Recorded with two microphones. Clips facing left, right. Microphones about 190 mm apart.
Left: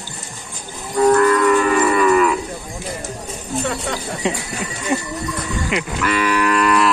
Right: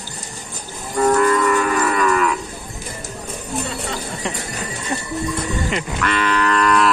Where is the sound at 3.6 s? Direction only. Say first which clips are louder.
Left 5 dB; 65° left (ahead or behind).